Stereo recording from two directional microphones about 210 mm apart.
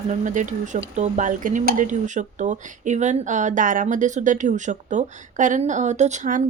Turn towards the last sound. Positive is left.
turn(degrees=-35)  # may be behind; listen again after turning